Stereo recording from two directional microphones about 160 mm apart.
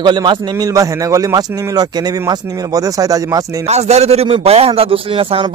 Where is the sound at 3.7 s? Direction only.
45° right (ahead or behind).